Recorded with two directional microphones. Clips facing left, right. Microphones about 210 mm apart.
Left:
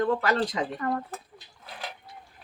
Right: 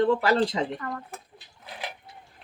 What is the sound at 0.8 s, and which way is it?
Speech, 30° left (ahead or behind).